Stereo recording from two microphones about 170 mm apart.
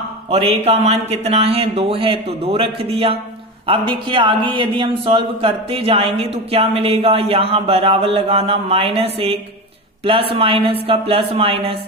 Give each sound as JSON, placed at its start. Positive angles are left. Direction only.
{"t": 0.3, "sound": "a woman's voice", "side_deg": -35}